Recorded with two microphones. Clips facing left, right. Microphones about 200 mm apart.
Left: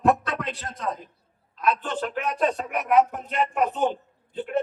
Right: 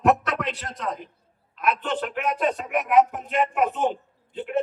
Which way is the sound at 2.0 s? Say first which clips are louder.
Left 1 dB; 40° left (ahead or behind).